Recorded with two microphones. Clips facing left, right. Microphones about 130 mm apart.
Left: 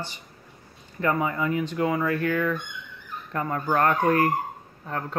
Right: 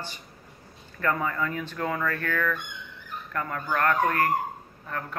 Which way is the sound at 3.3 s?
25° left (ahead or behind).